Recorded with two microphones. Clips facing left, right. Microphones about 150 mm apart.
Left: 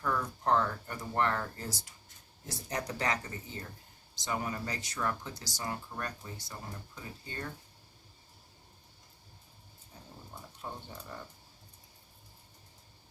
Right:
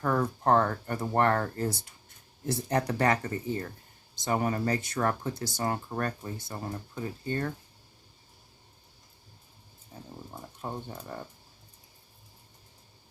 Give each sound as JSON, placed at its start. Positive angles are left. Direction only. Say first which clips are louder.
{"t": 0.0, "sound": "speech", "louder": "right 6 dB", "side_deg": -55}
{"t": 10.6, "sound": "speech", "louder": "right 6 dB", "side_deg": -45}